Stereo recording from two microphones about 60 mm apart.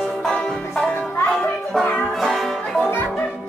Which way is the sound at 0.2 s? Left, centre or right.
Centre.